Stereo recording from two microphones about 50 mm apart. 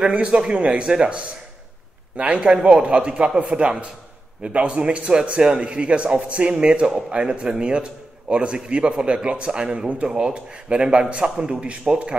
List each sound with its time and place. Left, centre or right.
0.0 s a man's voice: right